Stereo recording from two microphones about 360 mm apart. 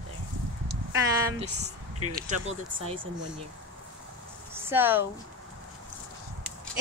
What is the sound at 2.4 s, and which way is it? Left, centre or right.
Speech, right.